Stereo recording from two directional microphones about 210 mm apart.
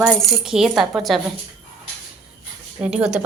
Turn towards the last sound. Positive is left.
turn(degrees=-5)  # may be behind; listen again after turning